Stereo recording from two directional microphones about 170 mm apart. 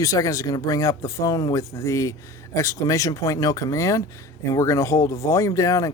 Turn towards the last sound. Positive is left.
turn(degrees=20)  # may be behind; listen again after turning